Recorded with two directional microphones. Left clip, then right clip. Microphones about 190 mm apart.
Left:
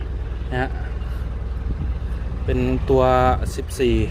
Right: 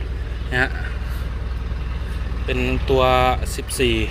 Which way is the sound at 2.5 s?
40° left (ahead or behind).